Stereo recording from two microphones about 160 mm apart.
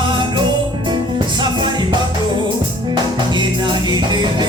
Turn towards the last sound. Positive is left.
turn(degrees=-25)  # may be behind; listen again after turning